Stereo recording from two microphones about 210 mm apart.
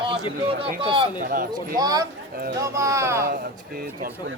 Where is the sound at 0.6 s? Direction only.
25° right (ahead or behind).